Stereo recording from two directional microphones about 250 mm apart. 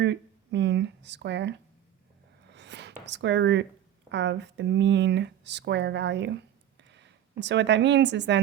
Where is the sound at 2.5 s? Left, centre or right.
Right.